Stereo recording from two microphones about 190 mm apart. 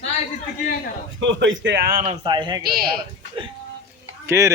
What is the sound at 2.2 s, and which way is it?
Speech, 25° right (ahead or behind).